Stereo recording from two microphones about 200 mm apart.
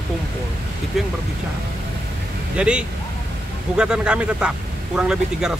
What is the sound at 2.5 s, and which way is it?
Speech, 5° right (ahead or behind).